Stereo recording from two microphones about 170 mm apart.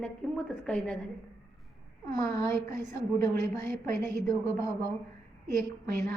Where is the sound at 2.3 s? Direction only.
15° left (ahead or behind).